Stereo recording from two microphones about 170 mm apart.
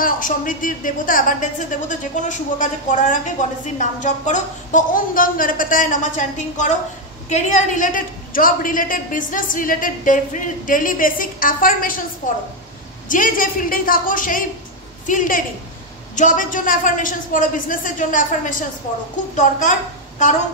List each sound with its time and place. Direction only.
0.0 s a woman's voice: 55° left (ahead or behind)
13.1 s a woman's voice: 55° left (ahead or behind)